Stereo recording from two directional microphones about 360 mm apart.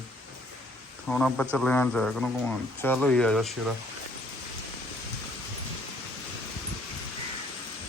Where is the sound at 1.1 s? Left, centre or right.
Centre.